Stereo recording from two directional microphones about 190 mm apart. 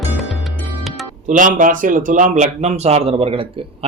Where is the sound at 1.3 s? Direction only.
45° right (ahead or behind).